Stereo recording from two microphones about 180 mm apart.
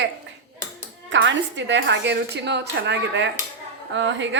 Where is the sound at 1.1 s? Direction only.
90° right.